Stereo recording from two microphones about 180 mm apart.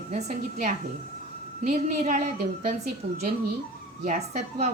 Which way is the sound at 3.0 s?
35° right (ahead or behind).